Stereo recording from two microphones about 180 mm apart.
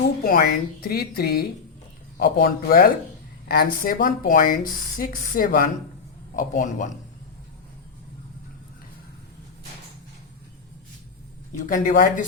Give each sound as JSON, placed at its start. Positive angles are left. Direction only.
{"t": 0.3, "sound": "speech", "side_deg": 50}
{"t": 11.6, "sound": "speech", "side_deg": 45}